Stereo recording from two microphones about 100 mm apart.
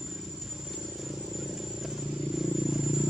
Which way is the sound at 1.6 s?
5° right (ahead or behind).